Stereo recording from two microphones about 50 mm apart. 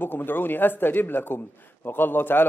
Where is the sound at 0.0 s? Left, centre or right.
Left.